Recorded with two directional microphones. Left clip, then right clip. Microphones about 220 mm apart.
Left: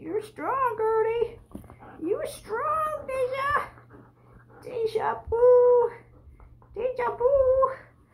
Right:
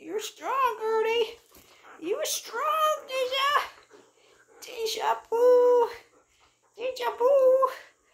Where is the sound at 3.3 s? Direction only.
10° left (ahead or behind).